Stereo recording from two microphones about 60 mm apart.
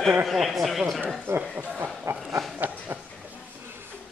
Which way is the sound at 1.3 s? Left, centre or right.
Right.